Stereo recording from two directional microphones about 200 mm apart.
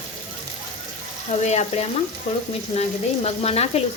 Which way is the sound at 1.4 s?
35° left (ahead or behind).